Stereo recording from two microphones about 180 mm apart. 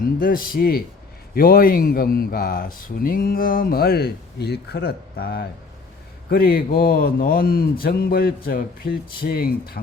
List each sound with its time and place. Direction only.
0.0 s speech: 50° left (ahead or behind)